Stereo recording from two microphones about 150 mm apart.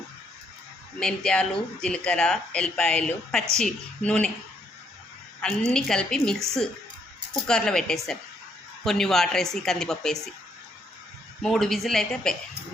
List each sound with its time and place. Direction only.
0.9 s speech: 5° left (ahead or behind)
5.4 s speech: 5° left (ahead or behind)
7.4 s speech: 5° left (ahead or behind)
11.4 s speech: 5° left (ahead or behind)